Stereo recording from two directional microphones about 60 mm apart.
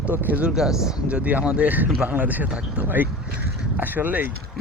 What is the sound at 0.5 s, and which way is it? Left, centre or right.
Speech, centre.